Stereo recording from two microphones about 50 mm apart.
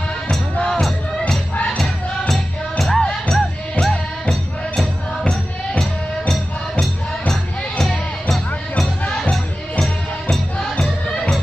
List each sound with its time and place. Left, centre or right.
0.7 s music: centre
1.5 s music: left
1.8 s music: centre
10.3 s music: centre